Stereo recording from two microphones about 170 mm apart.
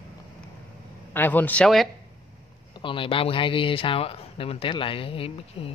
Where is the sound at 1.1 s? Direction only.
10° left (ahead or behind).